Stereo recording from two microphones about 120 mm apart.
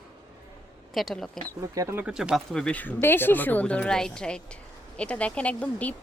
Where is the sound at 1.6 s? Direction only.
25° right (ahead or behind).